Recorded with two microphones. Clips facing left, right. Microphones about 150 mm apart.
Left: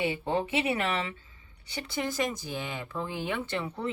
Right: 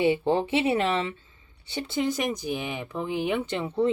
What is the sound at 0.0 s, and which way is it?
A woman's voice, 30° right (ahead or behind).